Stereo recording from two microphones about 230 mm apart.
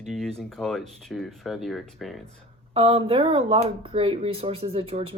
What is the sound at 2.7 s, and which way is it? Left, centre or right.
Speech, right.